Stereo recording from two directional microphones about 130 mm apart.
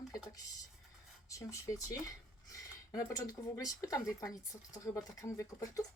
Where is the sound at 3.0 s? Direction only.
25° left (ahead or behind).